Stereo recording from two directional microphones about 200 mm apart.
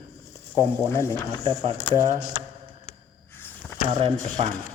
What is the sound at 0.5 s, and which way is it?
Speech, 10° left (ahead or behind).